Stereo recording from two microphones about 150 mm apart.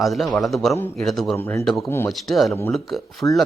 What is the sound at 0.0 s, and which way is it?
Speech, centre (ahead or behind).